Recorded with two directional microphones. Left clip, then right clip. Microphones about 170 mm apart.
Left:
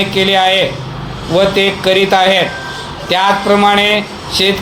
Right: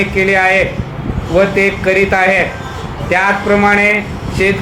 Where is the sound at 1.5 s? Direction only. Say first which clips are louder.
Left 1 dB; 50° left (ahead or behind).